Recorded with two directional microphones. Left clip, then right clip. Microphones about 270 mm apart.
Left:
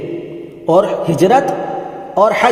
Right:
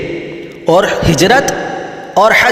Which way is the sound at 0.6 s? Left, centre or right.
Centre.